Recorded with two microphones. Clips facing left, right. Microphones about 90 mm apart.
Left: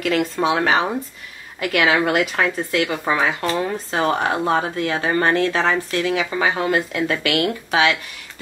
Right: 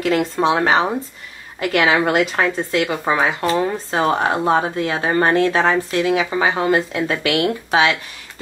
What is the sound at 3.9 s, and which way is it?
Speech, 30° right (ahead or behind).